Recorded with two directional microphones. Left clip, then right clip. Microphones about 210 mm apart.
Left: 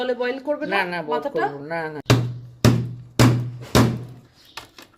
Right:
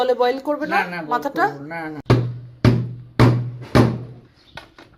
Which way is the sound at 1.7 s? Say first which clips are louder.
Left 2 dB; 50° left (ahead or behind).